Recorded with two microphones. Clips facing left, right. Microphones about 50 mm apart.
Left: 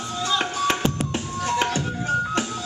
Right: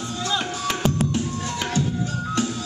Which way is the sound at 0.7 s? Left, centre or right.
Left.